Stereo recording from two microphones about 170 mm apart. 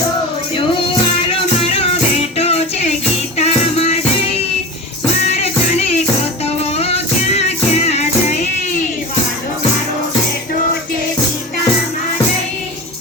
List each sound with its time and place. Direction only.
0.5 s music: 30° left (ahead or behind)